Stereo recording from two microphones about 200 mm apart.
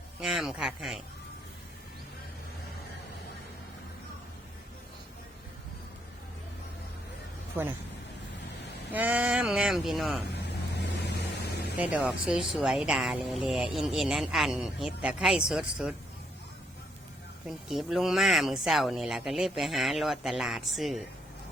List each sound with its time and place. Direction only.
0.2 s speech: 5° right (ahead or behind)
7.6 s speech: 10° right (ahead or behind)
8.9 s speech: 10° right (ahead or behind)
10.8 s vehicle: 60° left (ahead or behind)
11.8 s speech: 5° right (ahead or behind)
17.7 s speech: centre (ahead or behind)